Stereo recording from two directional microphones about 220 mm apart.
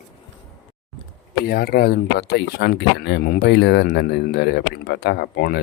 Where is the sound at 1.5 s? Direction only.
45° left (ahead or behind).